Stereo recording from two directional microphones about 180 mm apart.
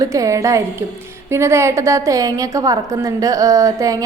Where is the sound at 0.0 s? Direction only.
20° right (ahead or behind).